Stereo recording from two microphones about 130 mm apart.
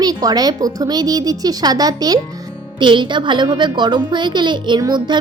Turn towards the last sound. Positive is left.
turn(degrees=-35)  # may be behind; listen again after turning